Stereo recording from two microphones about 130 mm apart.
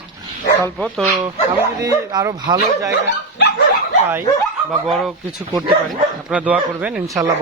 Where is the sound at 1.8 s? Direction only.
30° right (ahead or behind).